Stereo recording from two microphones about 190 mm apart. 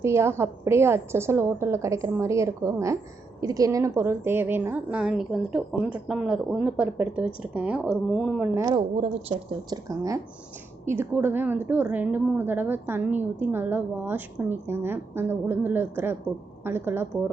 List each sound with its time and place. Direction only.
0.0 s a woman's voice: 15° right (ahead or behind)
8.5 s a woman's voice: 15° right (ahead or behind)
9.0 s a woman's voice: 30° right (ahead or behind); by 17.1 s 10° right (ahead or behind)